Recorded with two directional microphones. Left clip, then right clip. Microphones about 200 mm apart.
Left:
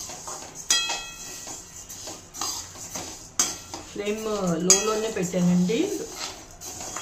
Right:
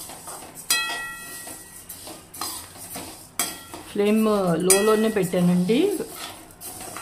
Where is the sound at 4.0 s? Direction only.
55° right (ahead or behind).